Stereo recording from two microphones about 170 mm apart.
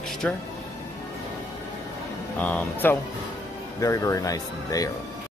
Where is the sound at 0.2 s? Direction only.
5° left (ahead or behind).